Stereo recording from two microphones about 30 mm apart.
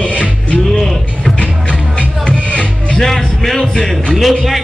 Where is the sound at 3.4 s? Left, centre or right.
Centre.